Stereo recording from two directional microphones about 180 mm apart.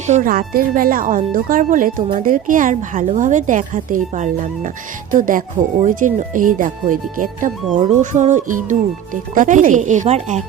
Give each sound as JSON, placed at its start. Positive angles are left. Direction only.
{"t": 0.0, "sound": "a woman's voice", "side_deg": -45}